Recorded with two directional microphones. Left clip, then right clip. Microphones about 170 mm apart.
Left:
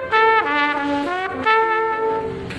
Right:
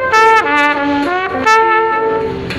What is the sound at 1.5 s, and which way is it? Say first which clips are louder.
Brass instrument: right 7 dB; 5° left (ahead or behind).